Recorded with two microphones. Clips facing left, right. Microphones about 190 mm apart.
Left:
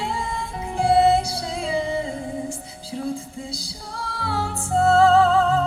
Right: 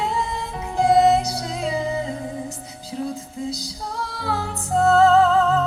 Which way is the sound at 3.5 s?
30° left (ahead or behind).